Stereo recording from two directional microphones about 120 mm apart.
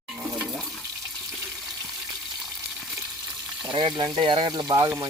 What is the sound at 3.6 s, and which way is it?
Speech, 40° right (ahead or behind).